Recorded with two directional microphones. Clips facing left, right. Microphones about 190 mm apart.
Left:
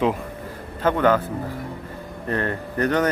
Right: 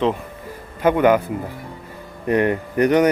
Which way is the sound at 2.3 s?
15° right (ahead or behind).